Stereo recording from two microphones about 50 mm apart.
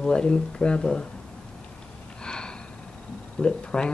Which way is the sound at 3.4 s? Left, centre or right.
Centre.